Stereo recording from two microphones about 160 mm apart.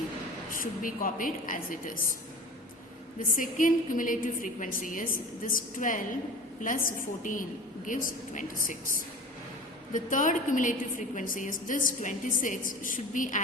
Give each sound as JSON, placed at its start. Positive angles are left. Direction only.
{"t": 0.5, "sound": "a woman's voice", "side_deg": 60}
{"t": 3.2, "sound": "a woman's voice", "side_deg": 55}